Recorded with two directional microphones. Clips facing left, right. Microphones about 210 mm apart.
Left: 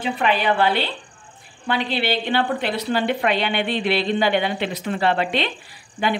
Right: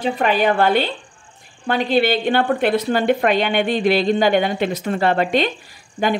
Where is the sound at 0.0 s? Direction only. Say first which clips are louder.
Right 4 dB; 45° right (ahead or behind).